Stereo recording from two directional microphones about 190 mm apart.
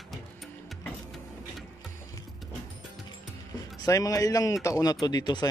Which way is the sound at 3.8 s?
15° left (ahead or behind).